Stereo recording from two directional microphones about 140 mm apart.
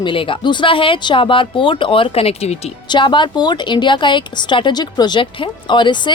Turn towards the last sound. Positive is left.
turn(degrees=35)  # may be behind; listen again after turning